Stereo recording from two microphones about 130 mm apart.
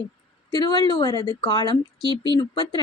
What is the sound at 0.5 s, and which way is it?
A woman's voice, 30° left (ahead or behind).